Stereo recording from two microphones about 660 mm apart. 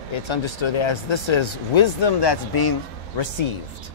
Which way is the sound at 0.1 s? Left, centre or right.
Left.